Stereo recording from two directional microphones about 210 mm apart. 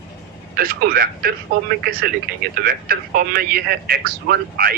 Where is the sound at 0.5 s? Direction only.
45° right (ahead or behind).